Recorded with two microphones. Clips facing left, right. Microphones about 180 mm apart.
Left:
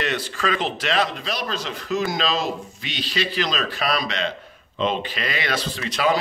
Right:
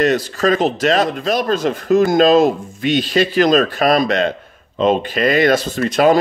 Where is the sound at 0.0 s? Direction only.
40° right (ahead or behind).